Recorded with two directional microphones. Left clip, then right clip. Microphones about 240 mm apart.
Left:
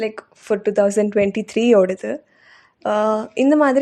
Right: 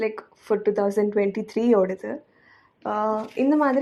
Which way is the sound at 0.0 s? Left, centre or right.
Left.